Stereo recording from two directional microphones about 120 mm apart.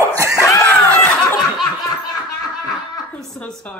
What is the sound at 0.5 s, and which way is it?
Snicker, 20° left (ahead or behind).